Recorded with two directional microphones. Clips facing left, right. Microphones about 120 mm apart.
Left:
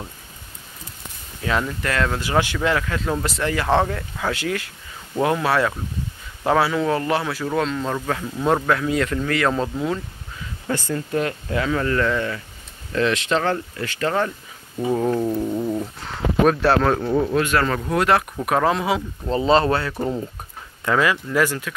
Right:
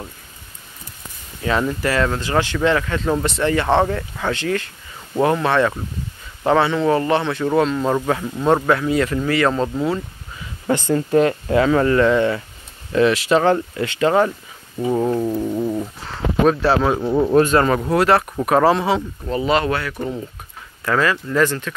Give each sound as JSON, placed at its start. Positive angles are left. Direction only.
{"t": 1.4, "sound": "speech", "side_deg": -5}
{"t": 2.1, "sound": "speech", "side_deg": 10}
{"t": 7.4, "sound": "speech", "side_deg": -10}
{"t": 10.7, "sound": "speech", "side_deg": -25}
{"t": 11.9, "sound": "speech", "side_deg": -25}
{"t": 12.9, "sound": "speech", "side_deg": -5}
{"t": 13.4, "sound": "speech", "side_deg": -20}
{"t": 14.9, "sound": "speech", "side_deg": -5}
{"t": 17.3, "sound": "speech", "side_deg": -30}
{"t": 17.6, "sound": "speech", "side_deg": -15}
{"t": 17.9, "sound": "speech", "side_deg": 0}
{"t": 19.2, "sound": "speech", "side_deg": 30}